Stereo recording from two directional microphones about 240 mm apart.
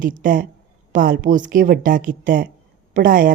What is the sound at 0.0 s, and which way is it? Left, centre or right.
Speech, right.